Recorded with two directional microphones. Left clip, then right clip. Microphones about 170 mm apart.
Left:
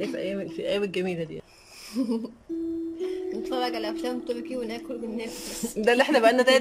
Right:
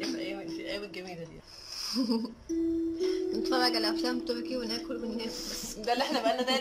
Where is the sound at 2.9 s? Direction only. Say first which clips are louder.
Even; 15° left (ahead or behind).